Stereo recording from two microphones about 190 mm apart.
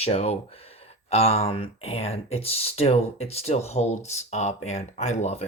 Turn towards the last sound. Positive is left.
turn(degrees=35)  # may be behind; listen again after turning